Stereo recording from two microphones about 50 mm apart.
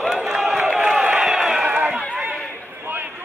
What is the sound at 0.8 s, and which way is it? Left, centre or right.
Crowd, centre.